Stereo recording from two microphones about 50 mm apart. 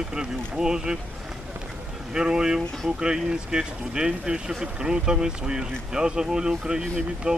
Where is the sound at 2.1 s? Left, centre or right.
Centre.